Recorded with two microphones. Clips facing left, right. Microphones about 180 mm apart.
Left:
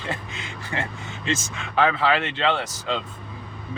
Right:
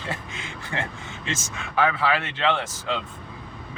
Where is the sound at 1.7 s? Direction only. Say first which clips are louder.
Left 2 dB; 25° left (ahead or behind).